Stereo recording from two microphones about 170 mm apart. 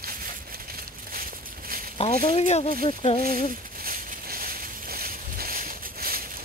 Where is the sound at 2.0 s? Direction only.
35° left (ahead or behind).